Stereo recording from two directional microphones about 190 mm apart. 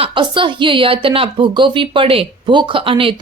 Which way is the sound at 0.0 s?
25° right (ahead or behind).